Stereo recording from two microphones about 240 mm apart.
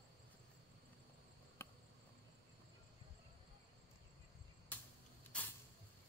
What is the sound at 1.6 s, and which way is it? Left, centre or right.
Cricket, centre.